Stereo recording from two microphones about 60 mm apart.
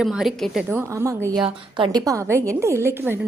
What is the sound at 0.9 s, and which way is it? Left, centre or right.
Speech, right.